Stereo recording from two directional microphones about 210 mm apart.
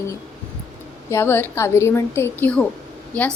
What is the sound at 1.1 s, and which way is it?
A woman's voice, 10° left (ahead or behind).